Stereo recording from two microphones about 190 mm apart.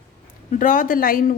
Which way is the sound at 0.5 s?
45° left (ahead or behind).